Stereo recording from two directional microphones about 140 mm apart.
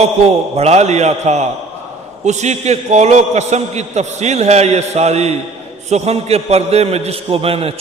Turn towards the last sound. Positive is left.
turn(degrees=-40)  # may be behind; listen again after turning